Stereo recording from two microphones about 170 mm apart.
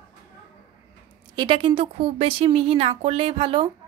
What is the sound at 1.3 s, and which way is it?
Speech, 25° right (ahead or behind).